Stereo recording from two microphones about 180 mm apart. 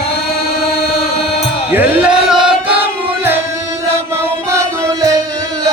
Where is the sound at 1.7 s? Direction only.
5° right (ahead or behind).